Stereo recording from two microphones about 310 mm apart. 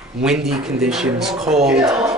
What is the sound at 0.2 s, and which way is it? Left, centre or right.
Speech, centre.